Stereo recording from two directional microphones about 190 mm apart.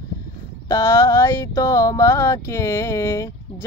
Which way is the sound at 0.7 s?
15° left (ahead or behind).